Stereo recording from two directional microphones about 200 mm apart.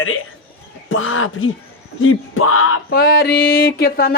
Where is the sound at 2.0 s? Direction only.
90° left.